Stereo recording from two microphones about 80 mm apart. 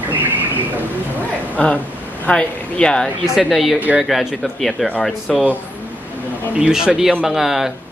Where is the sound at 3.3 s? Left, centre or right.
Centre.